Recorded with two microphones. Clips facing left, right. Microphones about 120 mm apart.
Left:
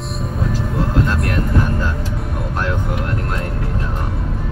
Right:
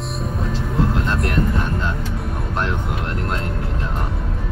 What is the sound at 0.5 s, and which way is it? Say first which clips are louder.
Vehicle: left 1 dB; 25° right (ahead or behind).